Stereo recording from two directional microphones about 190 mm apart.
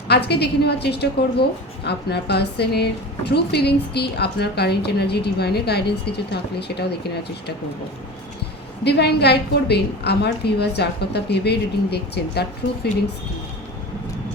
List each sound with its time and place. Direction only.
0.1 s a woman's voice: 60° left (ahead or behind)
8.8 s a woman's voice: 60° left (ahead or behind)